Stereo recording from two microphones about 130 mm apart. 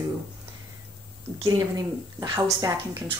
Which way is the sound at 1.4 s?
25° right (ahead or behind).